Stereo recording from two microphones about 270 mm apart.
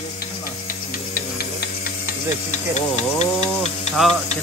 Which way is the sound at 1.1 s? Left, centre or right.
Left.